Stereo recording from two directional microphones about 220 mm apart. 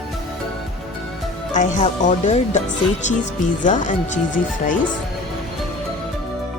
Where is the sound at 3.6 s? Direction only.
35° left (ahead or behind).